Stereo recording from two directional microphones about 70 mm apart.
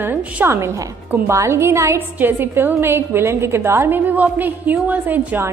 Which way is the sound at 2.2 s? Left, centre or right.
Right.